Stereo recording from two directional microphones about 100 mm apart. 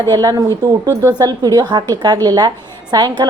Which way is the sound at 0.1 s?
40° right (ahead or behind).